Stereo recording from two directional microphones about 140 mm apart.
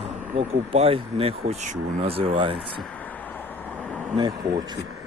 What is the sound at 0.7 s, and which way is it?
Speech, 40° right (ahead or behind).